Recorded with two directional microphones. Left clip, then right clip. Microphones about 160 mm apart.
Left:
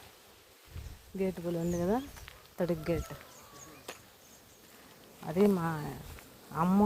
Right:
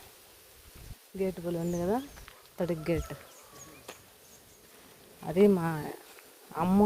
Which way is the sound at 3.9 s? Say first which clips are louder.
Left 2 dB; 75° left (ahead or behind).